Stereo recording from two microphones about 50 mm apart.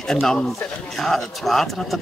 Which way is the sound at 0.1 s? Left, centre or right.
Centre.